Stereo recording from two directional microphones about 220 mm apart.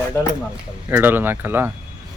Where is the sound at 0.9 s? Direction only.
10° right (ahead or behind).